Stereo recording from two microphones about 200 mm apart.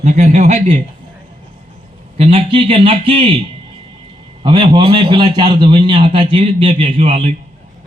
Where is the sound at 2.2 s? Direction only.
30° right (ahead or behind).